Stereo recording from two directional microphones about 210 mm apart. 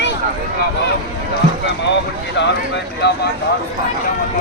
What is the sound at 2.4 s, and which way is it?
Speech, 55° left (ahead or behind).